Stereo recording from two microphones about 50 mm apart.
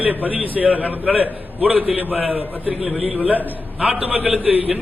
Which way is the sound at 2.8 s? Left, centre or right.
Centre.